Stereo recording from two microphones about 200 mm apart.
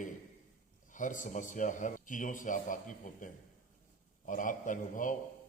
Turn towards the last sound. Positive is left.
turn(degrees=40)  # may be behind; listen again after turning